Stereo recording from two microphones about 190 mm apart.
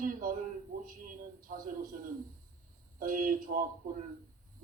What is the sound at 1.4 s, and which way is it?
Speech, 45° right (ahead or behind).